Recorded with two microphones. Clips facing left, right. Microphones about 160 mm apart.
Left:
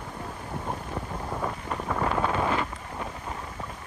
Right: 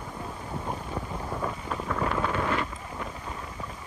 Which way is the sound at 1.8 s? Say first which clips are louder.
Left 2 dB; 20° left (ahead or behind).